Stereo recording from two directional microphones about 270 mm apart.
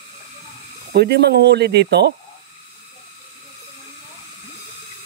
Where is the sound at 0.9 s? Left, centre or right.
Right.